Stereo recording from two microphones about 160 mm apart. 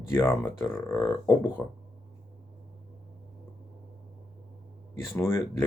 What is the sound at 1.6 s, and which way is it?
Speech, 5° left (ahead or behind).